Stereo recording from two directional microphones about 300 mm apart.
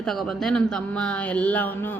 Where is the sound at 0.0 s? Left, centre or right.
Centre.